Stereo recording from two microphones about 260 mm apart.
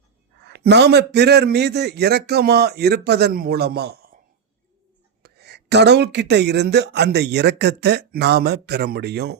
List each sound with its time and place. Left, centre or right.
0.4 s speech: right
5.2 s speech: right